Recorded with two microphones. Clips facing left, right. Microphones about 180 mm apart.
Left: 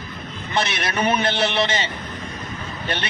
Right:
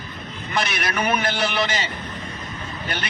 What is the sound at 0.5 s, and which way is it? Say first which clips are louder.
Speech: left 1 dB; 25° left (ahead or behind).